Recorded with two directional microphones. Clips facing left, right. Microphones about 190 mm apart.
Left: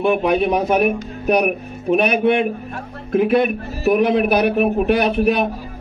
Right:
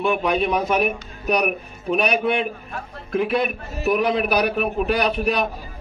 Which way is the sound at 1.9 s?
55° left (ahead or behind).